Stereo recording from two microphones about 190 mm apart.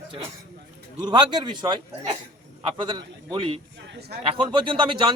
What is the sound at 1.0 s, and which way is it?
Speech, 25° right (ahead or behind).